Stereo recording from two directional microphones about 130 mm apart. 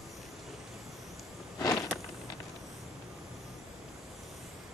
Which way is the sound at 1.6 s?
25° left (ahead or behind).